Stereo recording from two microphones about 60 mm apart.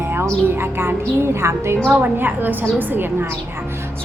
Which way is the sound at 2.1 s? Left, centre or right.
Right.